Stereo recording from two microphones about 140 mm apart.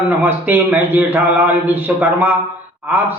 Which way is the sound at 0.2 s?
15° right (ahead or behind).